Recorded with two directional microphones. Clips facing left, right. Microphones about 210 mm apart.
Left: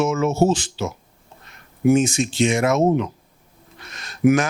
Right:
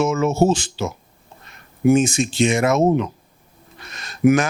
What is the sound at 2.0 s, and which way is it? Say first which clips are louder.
Speech: right 1 dB; 10° right (ahead or behind).